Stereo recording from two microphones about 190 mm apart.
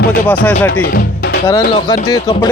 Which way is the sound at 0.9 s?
55° left (ahead or behind).